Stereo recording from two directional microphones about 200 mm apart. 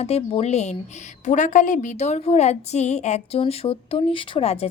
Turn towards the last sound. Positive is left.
turn(degrees=30)  # may be behind; listen again after turning